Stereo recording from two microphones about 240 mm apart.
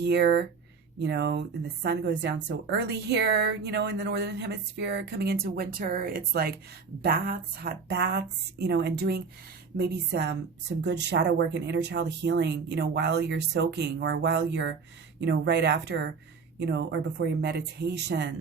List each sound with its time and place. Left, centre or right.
0.0 s a woman's voice: right